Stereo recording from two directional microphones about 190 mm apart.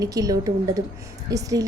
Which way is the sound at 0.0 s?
20° right (ahead or behind).